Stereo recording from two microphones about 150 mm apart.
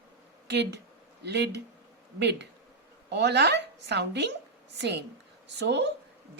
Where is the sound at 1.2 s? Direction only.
90° right.